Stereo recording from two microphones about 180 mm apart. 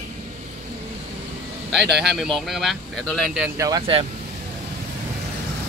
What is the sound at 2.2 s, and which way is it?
Speech, centre (ahead or behind).